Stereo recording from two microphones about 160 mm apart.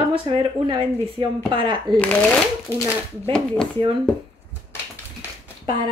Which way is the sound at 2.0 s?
10° left (ahead or behind).